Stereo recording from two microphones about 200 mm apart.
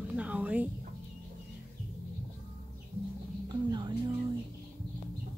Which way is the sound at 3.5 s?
20° right (ahead or behind).